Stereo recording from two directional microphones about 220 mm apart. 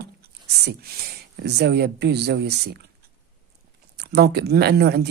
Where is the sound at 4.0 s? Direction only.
50° right (ahead or behind).